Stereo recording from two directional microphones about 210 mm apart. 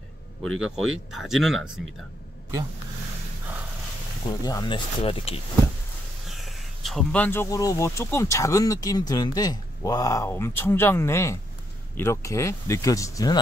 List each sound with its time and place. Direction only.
0.6 s speech: centre (ahead or behind)
4.3 s speech: 20° left (ahead or behind)
6.2 s speech: centre (ahead or behind); by 13.4 s 15° left (ahead or behind)